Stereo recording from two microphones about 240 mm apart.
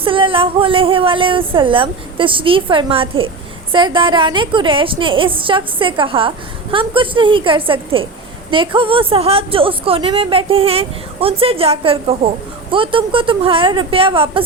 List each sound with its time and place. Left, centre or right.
0.0 s a woman's voice: right